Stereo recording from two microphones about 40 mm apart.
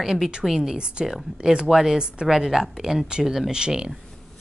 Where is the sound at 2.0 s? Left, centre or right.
Right.